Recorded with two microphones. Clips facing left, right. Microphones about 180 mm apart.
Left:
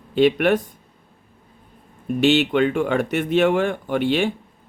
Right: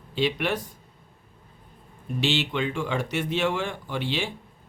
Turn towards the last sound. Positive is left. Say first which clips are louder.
# left 9 dB
turn(degrees=55)  # may be behind; listen again after turning